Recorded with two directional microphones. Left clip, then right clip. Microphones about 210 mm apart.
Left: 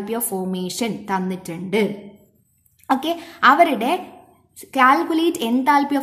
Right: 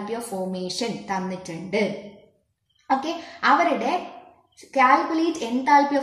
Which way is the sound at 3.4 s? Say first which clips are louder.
Left 5 dB; 35° left (ahead or behind).